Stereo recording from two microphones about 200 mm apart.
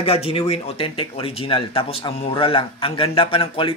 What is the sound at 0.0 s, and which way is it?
Speech, 30° left (ahead or behind).